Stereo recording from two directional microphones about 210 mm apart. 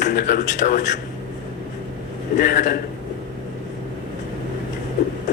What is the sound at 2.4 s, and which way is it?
Speech, 40° left (ahead or behind).